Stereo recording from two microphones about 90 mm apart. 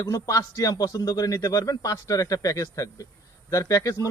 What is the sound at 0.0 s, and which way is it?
A man's voice, 40° left (ahead or behind).